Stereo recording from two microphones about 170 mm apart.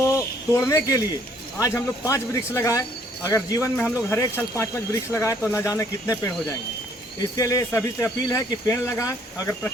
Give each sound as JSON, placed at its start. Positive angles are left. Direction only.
{"t": 0.5, "sound": "speech", "side_deg": 20}